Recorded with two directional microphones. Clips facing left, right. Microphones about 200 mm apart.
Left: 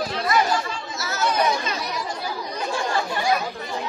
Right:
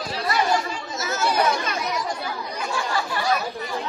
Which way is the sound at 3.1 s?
15° left (ahead or behind).